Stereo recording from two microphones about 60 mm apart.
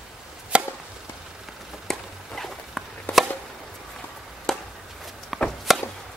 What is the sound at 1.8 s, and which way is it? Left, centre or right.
Chop, centre.